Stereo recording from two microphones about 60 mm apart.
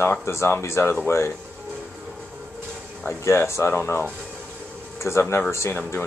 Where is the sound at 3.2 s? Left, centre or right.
Left.